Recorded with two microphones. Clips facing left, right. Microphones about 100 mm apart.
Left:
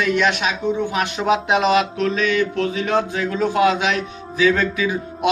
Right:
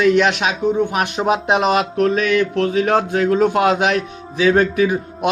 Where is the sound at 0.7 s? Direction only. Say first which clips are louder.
Right 3 dB; 50° right (ahead or behind).